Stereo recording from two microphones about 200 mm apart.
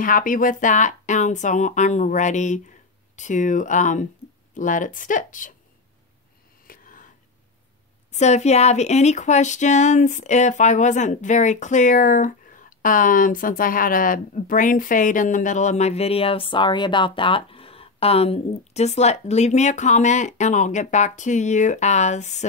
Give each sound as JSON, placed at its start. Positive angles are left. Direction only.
{"t": 0.0, "sound": "speech", "side_deg": 40}
{"t": 6.7, "sound": "a sound", "side_deg": 45}
{"t": 8.1, "sound": "speech", "side_deg": 35}